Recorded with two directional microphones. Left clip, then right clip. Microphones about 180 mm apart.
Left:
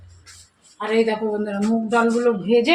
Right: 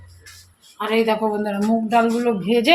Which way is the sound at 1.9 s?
45° right (ahead or behind).